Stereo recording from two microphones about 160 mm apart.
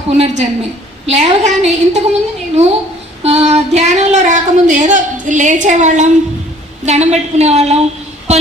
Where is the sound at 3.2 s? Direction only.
40° right (ahead or behind).